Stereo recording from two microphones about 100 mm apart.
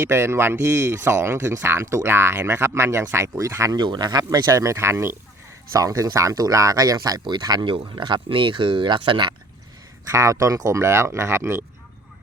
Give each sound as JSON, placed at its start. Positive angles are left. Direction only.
{"t": 0.0, "sound": "speech", "side_deg": -25}
{"t": 3.8, "sound": "speech", "side_deg": -45}
{"t": 7.6, "sound": "speech", "side_deg": -55}
{"t": 10.1, "sound": "speech", "side_deg": -30}